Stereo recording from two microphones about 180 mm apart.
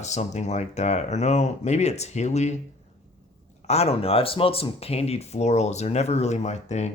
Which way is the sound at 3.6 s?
35° left (ahead or behind).